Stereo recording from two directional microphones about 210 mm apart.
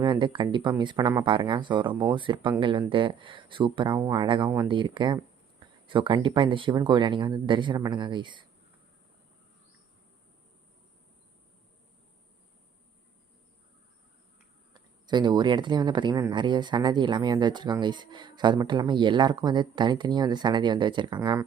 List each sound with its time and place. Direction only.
0.0 s speech: 20° right (ahead or behind)
14.7 s speech: 20° right (ahead or behind)